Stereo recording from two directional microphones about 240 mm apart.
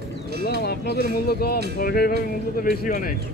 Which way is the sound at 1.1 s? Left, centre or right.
Left.